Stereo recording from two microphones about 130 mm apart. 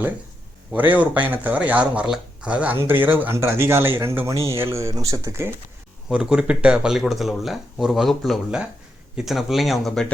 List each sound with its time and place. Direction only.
0.7 s speech: 15° right (ahead or behind)
6.1 s speech: 5° right (ahead or behind)